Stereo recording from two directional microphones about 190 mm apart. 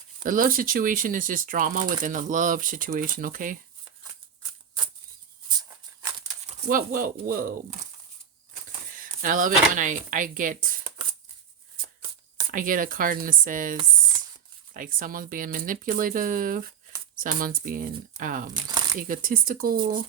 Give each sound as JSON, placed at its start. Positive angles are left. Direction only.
{"t": 0.2, "sound": "speech", "side_deg": -45}
{"t": 5.5, "sound": "a sound", "side_deg": -20}
{"t": 6.7, "sound": "speech", "side_deg": -45}
{"t": 9.0, "sound": "speech", "side_deg": -45}
{"t": 12.5, "sound": "speech", "side_deg": -45}